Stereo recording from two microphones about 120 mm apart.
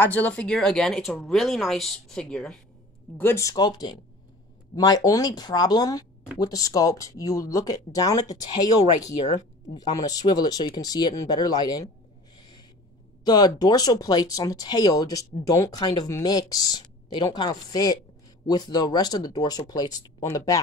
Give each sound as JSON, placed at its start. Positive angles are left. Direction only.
{"t": 0.0, "sound": "speech", "side_deg": 15}
{"t": 3.2, "sound": "speech", "side_deg": 20}
{"t": 12.4, "sound": "a sound", "side_deg": 40}
{"t": 13.2, "sound": "speech", "side_deg": 35}